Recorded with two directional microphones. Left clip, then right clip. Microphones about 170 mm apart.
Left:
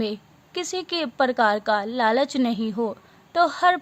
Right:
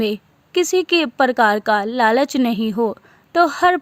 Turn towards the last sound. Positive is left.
turn(degrees=-45)  # may be behind; listen again after turning